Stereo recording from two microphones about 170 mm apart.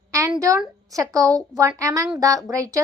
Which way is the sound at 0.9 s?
20° right (ahead or behind).